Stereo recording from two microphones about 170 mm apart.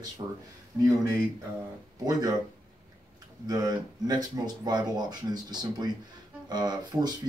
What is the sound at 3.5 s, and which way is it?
Speech, 25° right (ahead or behind).